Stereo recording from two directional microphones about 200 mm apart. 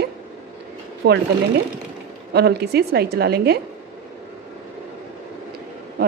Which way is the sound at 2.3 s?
55° right (ahead or behind).